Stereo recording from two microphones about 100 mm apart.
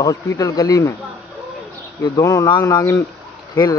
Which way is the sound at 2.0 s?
35° left (ahead or behind).